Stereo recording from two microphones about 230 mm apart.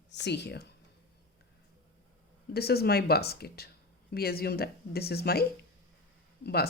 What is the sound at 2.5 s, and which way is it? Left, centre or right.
Speech, left.